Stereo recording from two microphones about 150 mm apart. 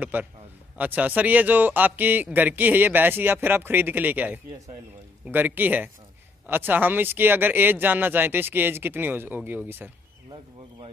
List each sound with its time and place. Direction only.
0.0 s a man's voice: 10° right (ahead or behind)